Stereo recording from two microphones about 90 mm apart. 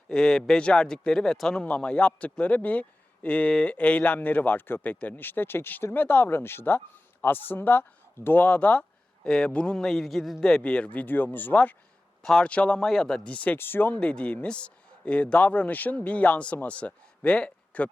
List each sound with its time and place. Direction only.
0.1 s a man's voice: 10° left (ahead or behind)